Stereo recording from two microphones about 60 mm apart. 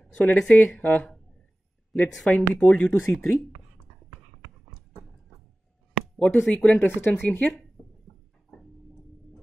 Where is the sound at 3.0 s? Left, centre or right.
Left.